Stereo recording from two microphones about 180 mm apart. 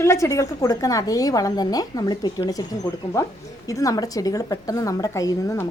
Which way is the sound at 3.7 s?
20° left (ahead or behind).